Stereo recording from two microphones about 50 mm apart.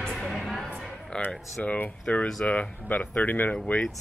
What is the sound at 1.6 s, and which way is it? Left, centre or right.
Speech, left.